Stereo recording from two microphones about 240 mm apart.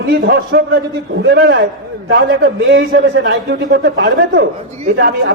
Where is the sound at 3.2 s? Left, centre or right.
Right.